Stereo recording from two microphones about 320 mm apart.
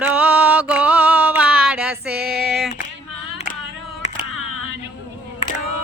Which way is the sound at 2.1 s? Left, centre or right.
Right.